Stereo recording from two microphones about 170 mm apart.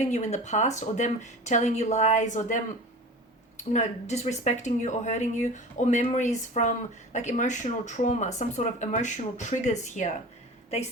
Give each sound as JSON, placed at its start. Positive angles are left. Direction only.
{"t": 0.0, "sound": "speech", "side_deg": 45}
{"t": 3.6, "sound": "speech", "side_deg": 45}